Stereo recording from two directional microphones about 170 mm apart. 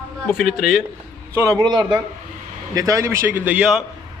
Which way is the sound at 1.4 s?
25° right (ahead or behind).